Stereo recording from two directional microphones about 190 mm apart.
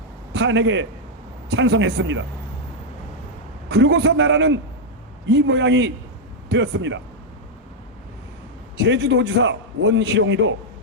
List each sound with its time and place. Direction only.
0.3 s a man's voice: 65° right (ahead or behind)
3.7 s a man's voice: 65° right (ahead or behind)
8.8 s a man's voice: 65° right (ahead or behind)